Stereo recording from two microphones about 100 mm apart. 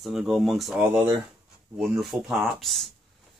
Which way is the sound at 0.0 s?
5° right (ahead or behind).